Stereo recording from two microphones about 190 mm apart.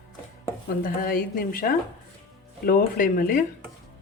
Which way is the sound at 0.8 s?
50° left (ahead or behind).